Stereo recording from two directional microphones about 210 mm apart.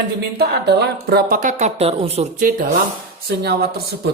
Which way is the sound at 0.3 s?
50° right (ahead or behind).